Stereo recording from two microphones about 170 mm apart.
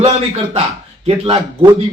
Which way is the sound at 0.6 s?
35° right (ahead or behind).